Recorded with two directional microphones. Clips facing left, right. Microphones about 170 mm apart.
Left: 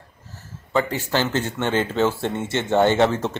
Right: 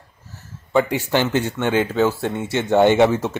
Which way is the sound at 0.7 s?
15° right (ahead or behind).